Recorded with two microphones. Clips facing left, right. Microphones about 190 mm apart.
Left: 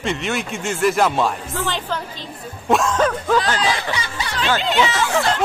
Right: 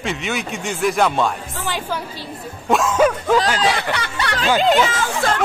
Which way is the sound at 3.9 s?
65° right (ahead or behind).